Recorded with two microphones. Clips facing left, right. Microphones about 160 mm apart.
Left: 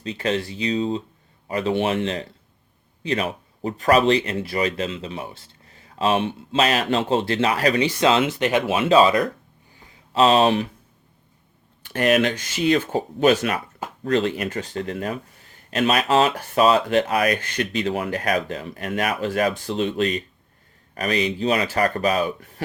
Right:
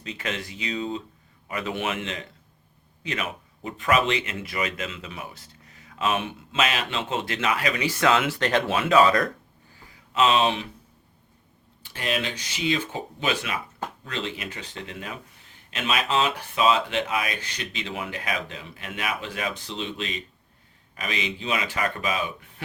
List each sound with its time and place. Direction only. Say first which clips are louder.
0.0 s speech: left 8 dB; 35° left (ahead or behind)
7.9 s speech: left 3 dB; 20° left (ahead or behind)
8.4 s speech: left 3 dB; 10° left (ahead or behind)
8.8 s speech: left 3 dB; 25° left (ahead or behind)
10.1 s speech: left 5 dB; 35° left (ahead or behind)
11.8 s speech: left 10 dB; 60° left (ahead or behind); by 22.6 s 40° left (ahead or behind)